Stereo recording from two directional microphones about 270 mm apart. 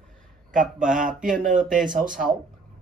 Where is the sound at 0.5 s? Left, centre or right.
Right.